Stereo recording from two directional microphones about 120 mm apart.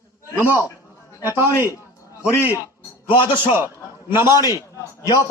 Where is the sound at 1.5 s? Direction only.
25° left (ahead or behind).